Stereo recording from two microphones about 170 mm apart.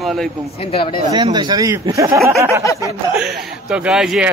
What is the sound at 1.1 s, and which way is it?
Speech, 25° right (ahead or behind).